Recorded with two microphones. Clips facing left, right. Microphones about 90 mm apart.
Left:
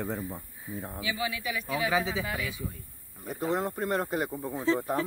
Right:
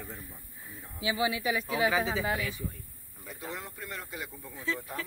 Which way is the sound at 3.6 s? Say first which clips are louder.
Left 12 dB; 50° left (ahead or behind).